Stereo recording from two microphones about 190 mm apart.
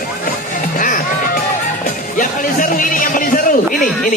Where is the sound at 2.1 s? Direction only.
45° left (ahead or behind).